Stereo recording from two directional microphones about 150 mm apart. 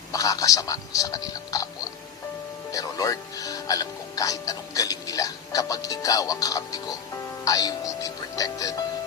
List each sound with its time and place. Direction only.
0.1 s speech: 25° left (ahead or behind)
2.7 s speech: 25° left (ahead or behind)